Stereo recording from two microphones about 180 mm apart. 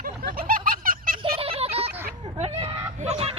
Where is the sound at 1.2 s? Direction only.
30° right (ahead or behind).